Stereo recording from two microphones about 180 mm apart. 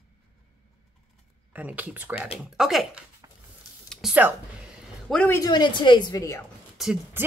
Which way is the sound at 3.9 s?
Centre (ahead or behind).